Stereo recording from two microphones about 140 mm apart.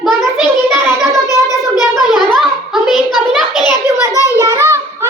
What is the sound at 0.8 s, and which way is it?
Child singing, 20° right (ahead or behind).